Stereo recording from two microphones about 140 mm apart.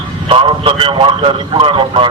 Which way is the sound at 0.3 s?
40° right (ahead or behind).